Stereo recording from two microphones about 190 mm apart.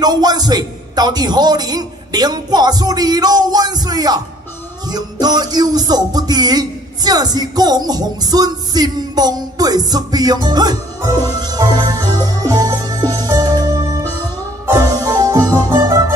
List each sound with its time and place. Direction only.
0.0 s music: 20° right (ahead or behind)
5.2 s music: 20° right (ahead or behind)